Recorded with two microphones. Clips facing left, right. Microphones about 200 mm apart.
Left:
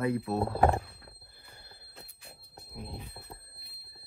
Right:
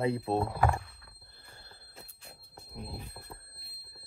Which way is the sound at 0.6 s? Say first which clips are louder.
Left 4 dB; 35° left (ahead or behind).